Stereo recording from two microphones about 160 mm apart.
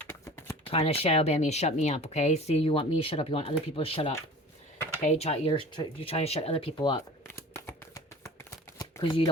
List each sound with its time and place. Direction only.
0.1 s a sound: 15° left (ahead or behind)
0.7 s speech: 35° left (ahead or behind)
7.3 s shuffling cards: 15° left (ahead or behind)
9.0 s speech: 30° left (ahead or behind)